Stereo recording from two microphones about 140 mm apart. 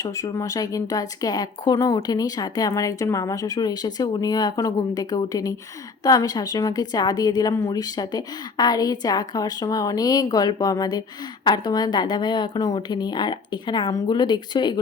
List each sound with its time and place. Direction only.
0.0 s a woman's voice: 25° left (ahead or behind)